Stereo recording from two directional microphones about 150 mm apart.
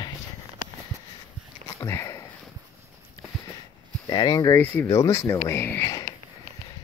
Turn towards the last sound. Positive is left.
turn(degrees=20)  # may be behind; listen again after turning